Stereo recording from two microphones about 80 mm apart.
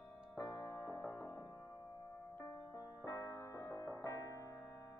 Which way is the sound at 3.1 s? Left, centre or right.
Left.